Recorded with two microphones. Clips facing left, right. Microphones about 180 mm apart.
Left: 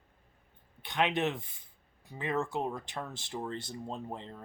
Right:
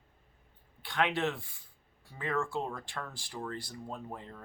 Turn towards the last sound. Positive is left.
turn(degrees=25)  # may be behind; listen again after turning